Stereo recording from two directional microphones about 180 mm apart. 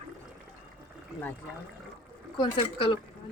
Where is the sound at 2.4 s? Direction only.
30° left (ahead or behind).